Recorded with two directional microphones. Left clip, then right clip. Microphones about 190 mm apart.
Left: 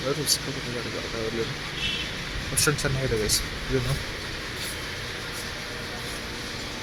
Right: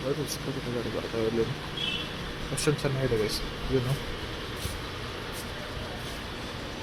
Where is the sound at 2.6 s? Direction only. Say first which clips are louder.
Left 3 dB; 10° right (ahead or behind).